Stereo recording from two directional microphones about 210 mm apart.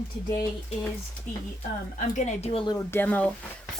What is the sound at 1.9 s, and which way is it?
A woman's voice, 30° left (ahead or behind).